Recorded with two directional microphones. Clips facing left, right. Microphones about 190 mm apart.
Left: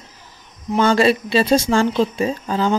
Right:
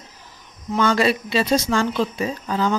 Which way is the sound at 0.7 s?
30° left (ahead or behind).